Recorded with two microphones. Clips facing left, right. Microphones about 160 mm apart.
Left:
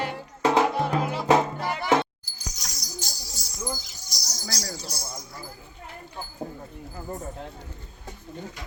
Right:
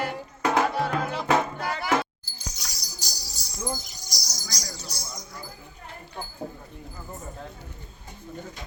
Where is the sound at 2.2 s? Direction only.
30° right (ahead or behind).